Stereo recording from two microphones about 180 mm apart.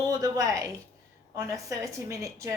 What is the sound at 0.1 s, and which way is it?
A woman's voice, 20° right (ahead or behind).